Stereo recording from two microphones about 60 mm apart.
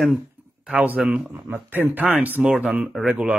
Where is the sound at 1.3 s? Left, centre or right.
Right.